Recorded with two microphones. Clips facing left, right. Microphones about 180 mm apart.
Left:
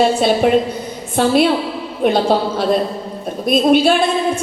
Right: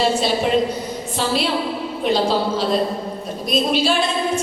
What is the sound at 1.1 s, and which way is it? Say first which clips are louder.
A woman's voice: left 8 dB; 55° left (ahead or behind).